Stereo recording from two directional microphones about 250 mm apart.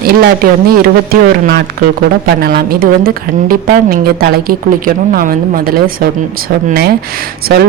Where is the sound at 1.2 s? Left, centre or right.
Right.